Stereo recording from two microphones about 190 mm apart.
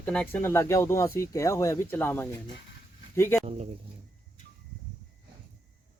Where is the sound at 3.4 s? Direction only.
35° right (ahead or behind).